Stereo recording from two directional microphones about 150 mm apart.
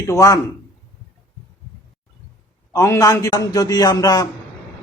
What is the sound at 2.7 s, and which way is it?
Speech, 20° left (ahead or behind).